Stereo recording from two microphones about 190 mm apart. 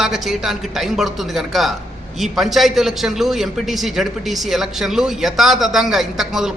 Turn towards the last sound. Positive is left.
turn(degrees=0)  # may be behind; listen again after turning